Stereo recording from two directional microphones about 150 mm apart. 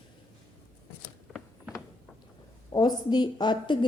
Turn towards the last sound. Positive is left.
turn(degrees=30)  # may be behind; listen again after turning